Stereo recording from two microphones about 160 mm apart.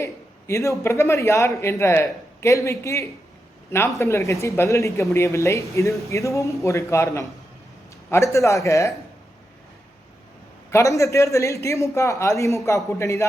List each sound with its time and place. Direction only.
0.0 s a man's voice: 20° left (ahead or behind)
10.7 s a man's voice: 20° left (ahead or behind)